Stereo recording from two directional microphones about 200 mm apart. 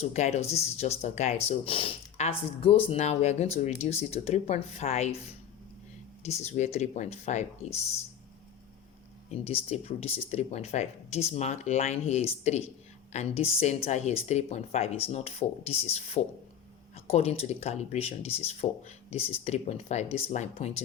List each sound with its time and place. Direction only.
0.0 s speech: 35° left (ahead or behind)
6.2 s speech: 35° left (ahead or behind)
9.3 s speech: 30° left (ahead or behind)